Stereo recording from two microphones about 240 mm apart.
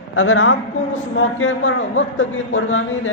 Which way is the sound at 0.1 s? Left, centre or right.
Left.